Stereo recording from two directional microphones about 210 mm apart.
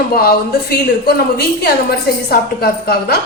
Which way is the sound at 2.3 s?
50° left (ahead or behind).